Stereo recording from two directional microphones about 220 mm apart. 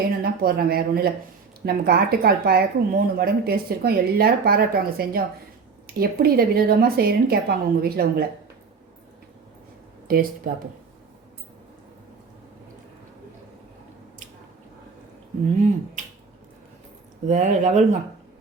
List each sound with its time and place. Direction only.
0.2 s speech: 45° right (ahead or behind)
10.1 s speech: 40° right (ahead or behind)
17.2 s speech: 35° right (ahead or behind)